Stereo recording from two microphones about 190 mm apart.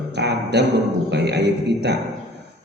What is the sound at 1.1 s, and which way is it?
Mantra, 60° right (ahead or behind).